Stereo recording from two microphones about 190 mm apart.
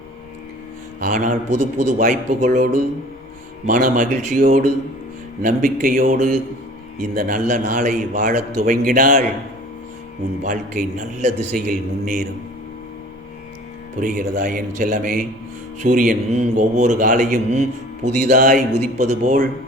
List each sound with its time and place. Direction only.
0.9 s a man's voice: 45° right (ahead or behind)
3.7 s a man's voice: 45° right (ahead or behind)
10.4 s a man's voice: 45° right (ahead or behind)
14.0 s a man's voice: 45° right (ahead or behind)